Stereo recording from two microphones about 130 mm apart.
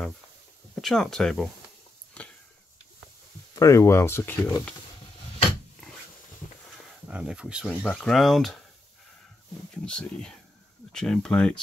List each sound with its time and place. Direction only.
0.7 s speech: centre (ahead or behind)
2.2 s a sound: 10° left (ahead or behind)
3.5 s speech: 25° left (ahead or behind)
7.1 s speech: 10° right (ahead or behind)
9.8 s speech: 5° left (ahead or behind)